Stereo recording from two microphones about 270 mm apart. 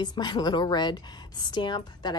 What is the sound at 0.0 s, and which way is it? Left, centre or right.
A woman's voice, centre.